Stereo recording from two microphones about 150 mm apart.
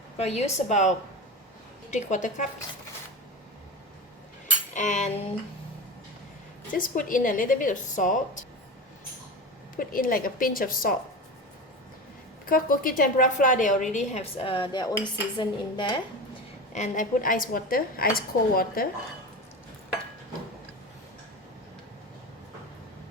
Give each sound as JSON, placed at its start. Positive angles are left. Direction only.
{"t": 0.2, "sound": "a woman's voice", "side_deg": 45}
{"t": 4.7, "sound": "cutlery", "side_deg": 55}
{"t": 6.7, "sound": "a woman's voice", "side_deg": 65}
{"t": 9.7, "sound": "a woman's voice", "side_deg": 70}
{"t": 12.5, "sound": "a woman's voice", "side_deg": 70}
{"t": 16.7, "sound": "a woman's voice", "side_deg": 55}